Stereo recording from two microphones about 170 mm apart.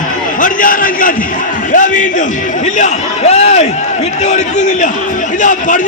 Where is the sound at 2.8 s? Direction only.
40° left (ahead or behind).